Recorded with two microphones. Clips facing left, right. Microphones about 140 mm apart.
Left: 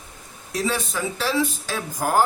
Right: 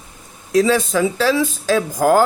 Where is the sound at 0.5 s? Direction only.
90° right.